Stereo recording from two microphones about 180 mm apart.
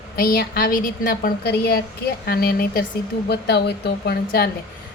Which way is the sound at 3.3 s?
65° left (ahead or behind).